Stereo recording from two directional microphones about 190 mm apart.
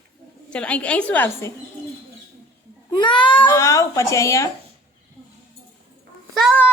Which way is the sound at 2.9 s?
25° left (ahead or behind).